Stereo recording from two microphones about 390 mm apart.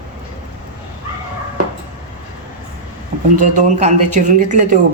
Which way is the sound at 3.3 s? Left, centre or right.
Centre.